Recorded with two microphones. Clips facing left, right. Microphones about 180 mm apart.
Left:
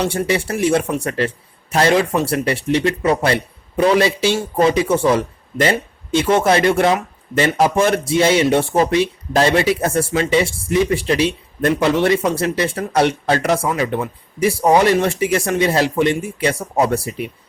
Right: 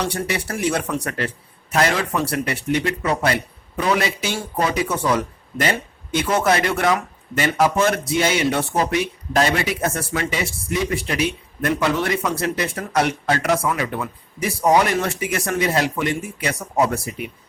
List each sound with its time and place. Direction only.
0.3 s speech: 25° left (ahead or behind)